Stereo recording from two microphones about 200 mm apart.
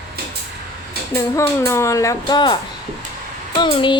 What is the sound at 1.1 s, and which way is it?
Speech, 15° left (ahead or behind).